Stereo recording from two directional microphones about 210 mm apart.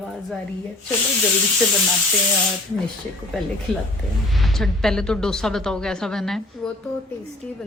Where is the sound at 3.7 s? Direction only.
5° left (ahead or behind).